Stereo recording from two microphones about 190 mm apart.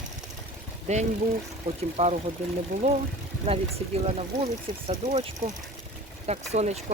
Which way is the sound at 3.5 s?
30° right (ahead or behind).